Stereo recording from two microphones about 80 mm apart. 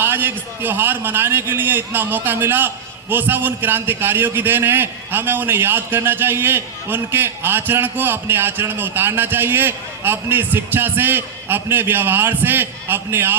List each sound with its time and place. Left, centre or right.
0.0 s a man's voice: right